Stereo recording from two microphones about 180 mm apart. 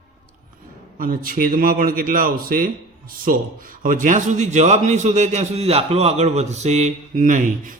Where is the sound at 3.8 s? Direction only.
45° right (ahead or behind).